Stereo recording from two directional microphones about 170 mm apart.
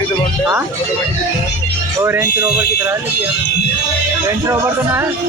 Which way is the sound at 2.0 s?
15° right (ahead or behind).